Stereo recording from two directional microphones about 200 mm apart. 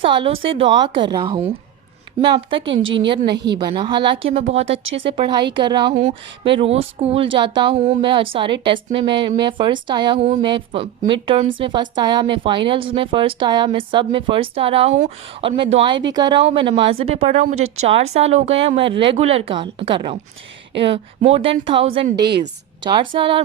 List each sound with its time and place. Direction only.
0.0 s a woman's voice: 25° right (ahead or behind)
2.6 s a woman's voice: 70° right (ahead or behind)
3.4 s a woman's voice: 20° right (ahead or behind)
4.8 s a woman's voice: 75° right (ahead or behind)
5.1 s a woman's voice: 25° right (ahead or behind)
22.1 s a woman's voice: 55° right (ahead or behind)
22.8 s a woman's voice: 20° right (ahead or behind)